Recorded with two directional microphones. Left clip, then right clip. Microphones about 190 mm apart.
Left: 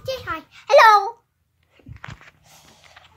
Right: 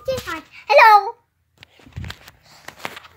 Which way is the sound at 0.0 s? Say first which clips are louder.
Right 3 dB; 20° left (ahead or behind).